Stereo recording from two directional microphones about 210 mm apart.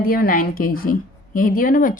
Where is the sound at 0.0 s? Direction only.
45° left (ahead or behind).